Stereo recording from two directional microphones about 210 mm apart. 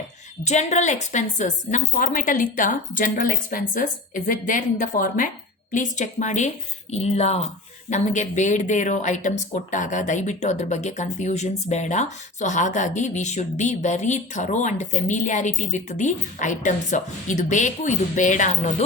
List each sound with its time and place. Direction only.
0.4 s speech: 35° left (ahead or behind)